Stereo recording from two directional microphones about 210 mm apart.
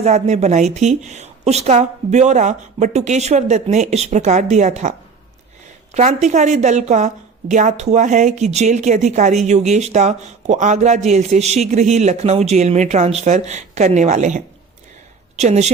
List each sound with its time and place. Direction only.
0.0 s a woman's voice: 30° right (ahead or behind)